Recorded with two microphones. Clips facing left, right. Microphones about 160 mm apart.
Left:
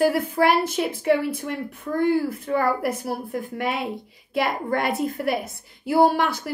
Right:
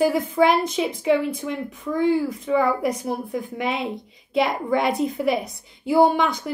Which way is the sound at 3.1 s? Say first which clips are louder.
Right 1 dB; 20° right (ahead or behind).